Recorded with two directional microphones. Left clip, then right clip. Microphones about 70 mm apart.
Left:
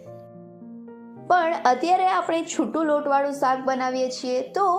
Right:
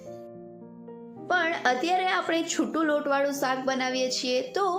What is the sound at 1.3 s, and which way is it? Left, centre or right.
Speech, left.